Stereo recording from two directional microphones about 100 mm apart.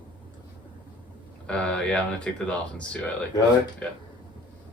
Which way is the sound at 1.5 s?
10° left (ahead or behind).